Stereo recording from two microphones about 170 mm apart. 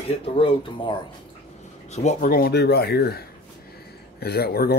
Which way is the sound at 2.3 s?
70° left (ahead or behind).